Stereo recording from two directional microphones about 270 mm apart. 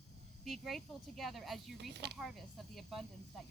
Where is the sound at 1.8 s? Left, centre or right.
Right.